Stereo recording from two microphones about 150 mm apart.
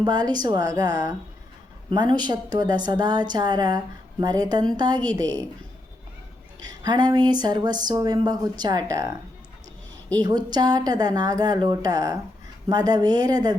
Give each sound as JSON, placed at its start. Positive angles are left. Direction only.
{"t": 0.0, "sound": "speech", "side_deg": -30}
{"t": 6.6, "sound": "speech", "side_deg": -25}
{"t": 10.2, "sound": "speech", "side_deg": -25}